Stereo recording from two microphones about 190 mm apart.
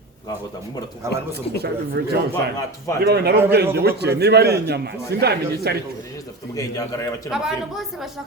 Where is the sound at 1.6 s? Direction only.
60° right (ahead or behind).